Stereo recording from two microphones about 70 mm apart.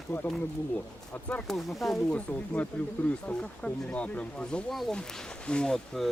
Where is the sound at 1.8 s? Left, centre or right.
Centre.